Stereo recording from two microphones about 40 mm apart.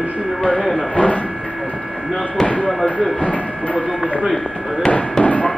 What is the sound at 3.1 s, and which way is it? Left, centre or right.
Speech, left.